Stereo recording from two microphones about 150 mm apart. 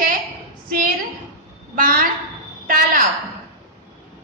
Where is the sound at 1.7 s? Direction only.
65° right (ahead or behind).